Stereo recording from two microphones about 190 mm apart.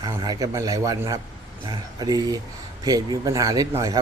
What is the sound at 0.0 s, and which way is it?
A man's voice, 20° right (ahead or behind).